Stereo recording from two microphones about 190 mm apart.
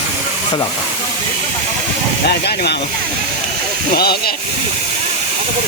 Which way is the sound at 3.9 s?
55° left (ahead or behind).